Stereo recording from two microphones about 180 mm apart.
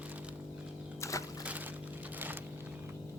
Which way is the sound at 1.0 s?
15° left (ahead or behind).